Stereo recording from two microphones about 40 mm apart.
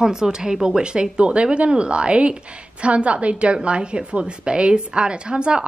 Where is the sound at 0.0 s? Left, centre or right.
Centre.